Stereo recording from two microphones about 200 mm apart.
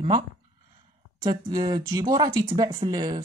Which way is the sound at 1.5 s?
20° right (ahead or behind).